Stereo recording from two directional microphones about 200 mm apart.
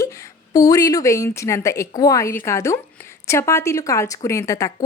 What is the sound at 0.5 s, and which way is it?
Speech, 15° left (ahead or behind).